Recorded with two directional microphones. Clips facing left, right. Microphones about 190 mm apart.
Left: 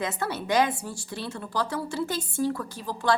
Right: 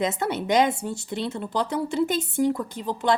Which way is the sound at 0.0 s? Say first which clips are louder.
Right 5 dB; 20° right (ahead or behind).